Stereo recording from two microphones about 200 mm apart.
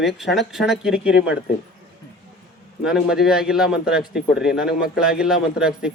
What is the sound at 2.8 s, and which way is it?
Speech, 5° right (ahead or behind).